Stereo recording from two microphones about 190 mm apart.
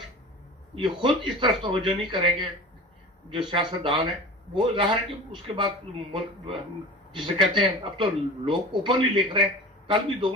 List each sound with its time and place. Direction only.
0.8 s a man's voice: 25° right (ahead or behind)